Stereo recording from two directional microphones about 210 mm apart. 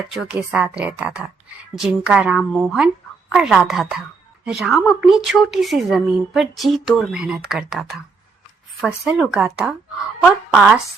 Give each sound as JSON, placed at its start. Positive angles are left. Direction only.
{"t": 0.1, "sound": "speech", "side_deg": -5}